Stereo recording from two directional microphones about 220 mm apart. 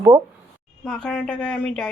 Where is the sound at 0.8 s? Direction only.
Centre (ahead or behind).